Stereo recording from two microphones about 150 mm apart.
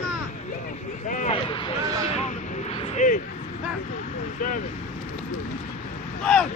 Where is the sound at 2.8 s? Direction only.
50° left (ahead or behind).